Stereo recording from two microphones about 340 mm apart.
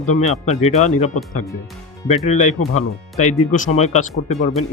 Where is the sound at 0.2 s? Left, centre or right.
Centre.